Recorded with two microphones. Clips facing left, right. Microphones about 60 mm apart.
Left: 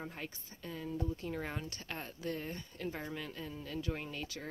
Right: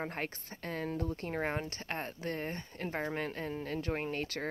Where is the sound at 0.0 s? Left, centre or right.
Right.